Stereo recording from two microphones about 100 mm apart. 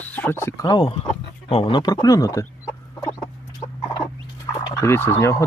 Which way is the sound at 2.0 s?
35° left (ahead or behind).